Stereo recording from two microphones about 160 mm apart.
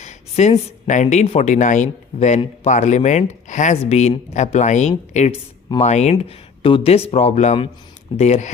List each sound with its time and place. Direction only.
0.0 s speech: 45° left (ahead or behind)